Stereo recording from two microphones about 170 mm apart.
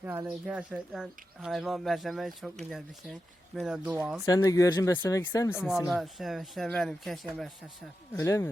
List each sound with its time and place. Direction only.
0.0 s speech: 10° right (ahead or behind)
4.3 s speech: 20° left (ahead or behind)
5.9 s speech: centre (ahead or behind)
8.1 s speech: 15° left (ahead or behind)